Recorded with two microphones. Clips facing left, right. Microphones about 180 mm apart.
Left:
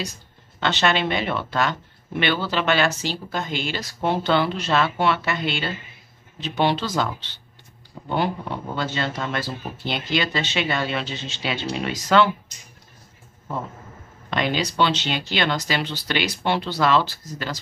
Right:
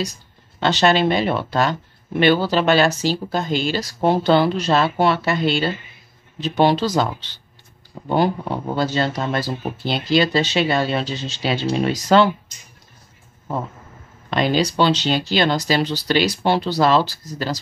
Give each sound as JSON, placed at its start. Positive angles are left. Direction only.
{"t": 0.6, "sound": "speech", "side_deg": -35}
{"t": 14.3, "sound": "speech", "side_deg": -35}